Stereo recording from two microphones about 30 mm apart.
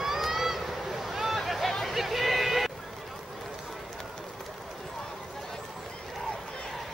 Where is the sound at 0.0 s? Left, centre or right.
Centre.